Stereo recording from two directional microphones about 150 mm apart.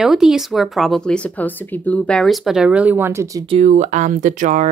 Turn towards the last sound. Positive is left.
turn(degrees=-55)  # may be behind; listen again after turning